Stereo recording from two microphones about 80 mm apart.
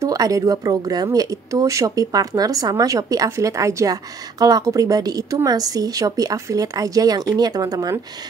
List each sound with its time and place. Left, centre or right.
0.0 s speech: right